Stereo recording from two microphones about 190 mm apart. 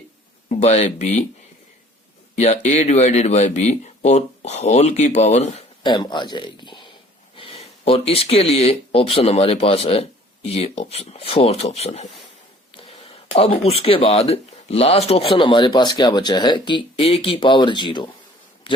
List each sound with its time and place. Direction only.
0.4 s speech: 35° left (ahead or behind)
2.4 s speech: 35° left (ahead or behind)
5.8 s speech: 25° left (ahead or behind)
13.3 s speech: 30° left (ahead or behind)